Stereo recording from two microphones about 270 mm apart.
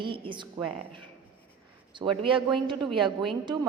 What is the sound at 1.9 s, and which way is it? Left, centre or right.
Speech, centre.